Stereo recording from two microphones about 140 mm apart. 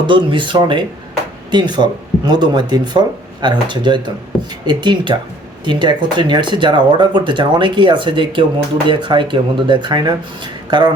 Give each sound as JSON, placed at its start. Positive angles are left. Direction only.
{"t": 0.1, "sound": "speech", "side_deg": -35}